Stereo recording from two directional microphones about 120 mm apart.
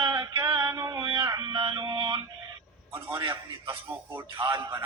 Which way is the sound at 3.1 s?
40° right (ahead or behind).